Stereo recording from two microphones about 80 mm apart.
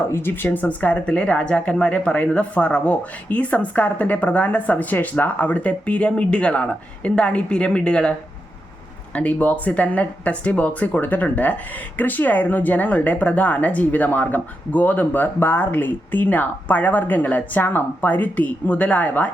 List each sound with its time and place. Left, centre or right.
0.1 s speech: left; by 8.1 s centre
9.1 s speech: centre